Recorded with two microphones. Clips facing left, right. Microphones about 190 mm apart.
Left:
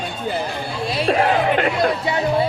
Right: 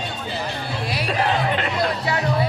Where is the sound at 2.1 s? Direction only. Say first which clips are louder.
Left 3 dB; 25° left (ahead or behind).